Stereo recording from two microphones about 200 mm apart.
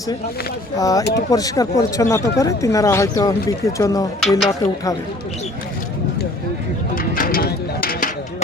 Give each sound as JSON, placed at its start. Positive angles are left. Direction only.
{"t": 0.8, "sound": "speech", "side_deg": 15}
{"t": 4.2, "sound": "speech", "side_deg": 0}
{"t": 6.9, "sound": "a sound", "side_deg": 45}